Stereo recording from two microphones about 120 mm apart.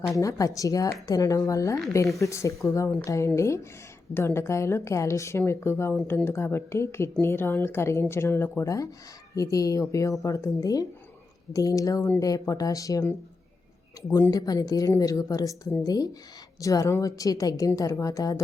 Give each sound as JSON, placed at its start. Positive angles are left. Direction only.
{"t": 0.1, "sound": "a woman's voice", "side_deg": 25}